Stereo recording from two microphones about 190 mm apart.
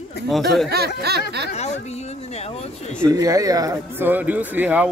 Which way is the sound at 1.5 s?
35° left (ahead or behind).